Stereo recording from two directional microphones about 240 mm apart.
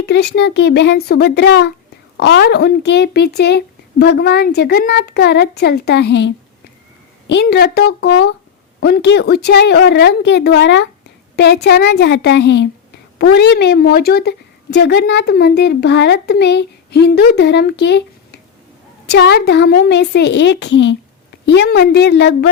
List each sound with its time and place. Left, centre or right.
0.0 s a woman's voice: left